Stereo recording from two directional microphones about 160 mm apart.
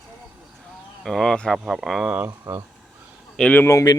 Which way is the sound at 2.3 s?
20° right (ahead or behind).